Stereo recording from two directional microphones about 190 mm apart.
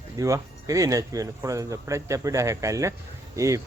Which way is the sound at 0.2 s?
15° right (ahead or behind).